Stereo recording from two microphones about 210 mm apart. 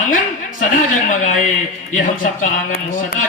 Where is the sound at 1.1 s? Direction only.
35° left (ahead or behind).